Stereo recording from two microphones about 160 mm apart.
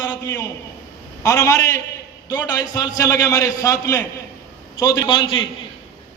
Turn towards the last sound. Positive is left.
turn(degrees=30)  # may be behind; listen again after turning